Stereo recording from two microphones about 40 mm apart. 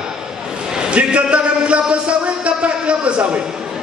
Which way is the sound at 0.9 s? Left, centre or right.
Right.